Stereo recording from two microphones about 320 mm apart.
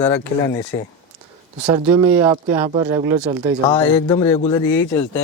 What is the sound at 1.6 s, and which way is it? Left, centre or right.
Speech, centre.